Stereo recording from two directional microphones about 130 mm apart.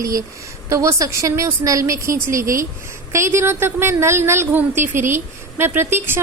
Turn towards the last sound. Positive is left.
turn(degrees=-20)  # may be behind; listen again after turning